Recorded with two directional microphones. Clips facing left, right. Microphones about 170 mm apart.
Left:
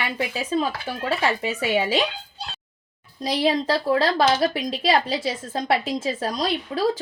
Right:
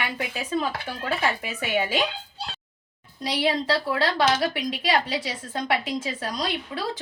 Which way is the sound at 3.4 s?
25° left (ahead or behind).